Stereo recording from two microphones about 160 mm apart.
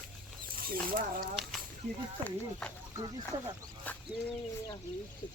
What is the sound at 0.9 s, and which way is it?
Speech, 65° right (ahead or behind).